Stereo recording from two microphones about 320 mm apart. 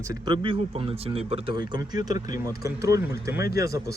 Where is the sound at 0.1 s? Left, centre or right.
Centre.